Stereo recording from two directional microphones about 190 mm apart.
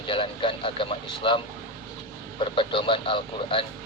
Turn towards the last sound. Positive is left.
turn(degrees=25)  # may be behind; listen again after turning